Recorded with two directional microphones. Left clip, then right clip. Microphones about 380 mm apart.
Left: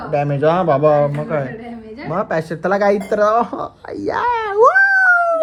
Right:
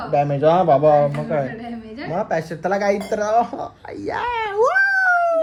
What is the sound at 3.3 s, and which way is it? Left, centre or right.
Speech, left.